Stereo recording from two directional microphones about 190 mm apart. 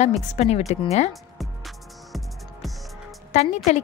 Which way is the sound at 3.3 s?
40° left (ahead or behind).